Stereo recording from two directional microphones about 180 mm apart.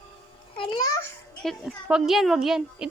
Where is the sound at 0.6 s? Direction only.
20° left (ahead or behind).